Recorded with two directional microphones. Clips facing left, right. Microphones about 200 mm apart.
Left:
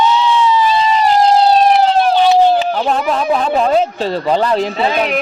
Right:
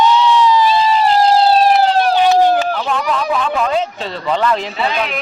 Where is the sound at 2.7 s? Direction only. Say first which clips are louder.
Left 3 dB; 40° left (ahead or behind).